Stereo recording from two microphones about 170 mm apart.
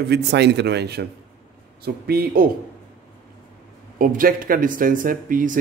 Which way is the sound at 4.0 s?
55° right (ahead or behind).